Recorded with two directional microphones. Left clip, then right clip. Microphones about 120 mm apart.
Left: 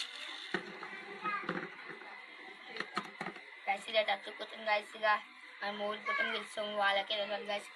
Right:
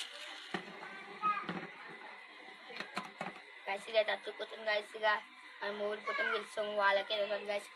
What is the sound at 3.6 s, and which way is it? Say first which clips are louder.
A woman's voice: left 1 dB; 30° right (ahead or behind).